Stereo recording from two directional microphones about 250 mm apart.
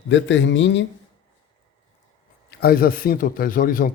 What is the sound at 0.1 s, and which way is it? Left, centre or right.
Speech, left.